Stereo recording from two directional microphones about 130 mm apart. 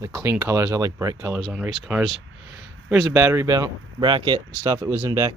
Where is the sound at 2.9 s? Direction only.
20° right (ahead or behind).